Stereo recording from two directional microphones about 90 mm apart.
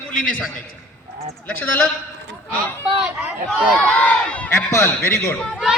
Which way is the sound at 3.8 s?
10° left (ahead or behind).